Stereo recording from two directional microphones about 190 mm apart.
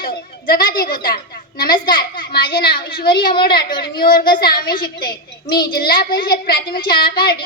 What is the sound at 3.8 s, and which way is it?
A child's voice, 50° left (ahead or behind).